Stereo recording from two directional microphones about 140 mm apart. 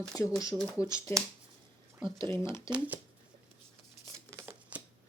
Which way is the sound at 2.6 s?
10° right (ahead or behind).